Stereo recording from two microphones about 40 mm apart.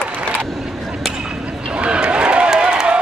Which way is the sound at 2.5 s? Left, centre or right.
Right.